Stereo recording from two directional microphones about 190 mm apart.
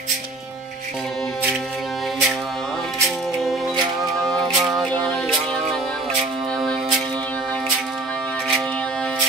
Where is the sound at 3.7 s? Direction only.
25° right (ahead or behind).